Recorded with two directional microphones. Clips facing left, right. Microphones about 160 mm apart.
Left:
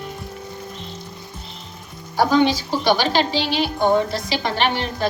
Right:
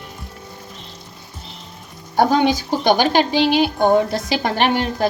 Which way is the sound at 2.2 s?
50° right (ahead or behind).